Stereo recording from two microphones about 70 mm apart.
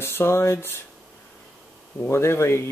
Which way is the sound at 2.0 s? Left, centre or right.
Left.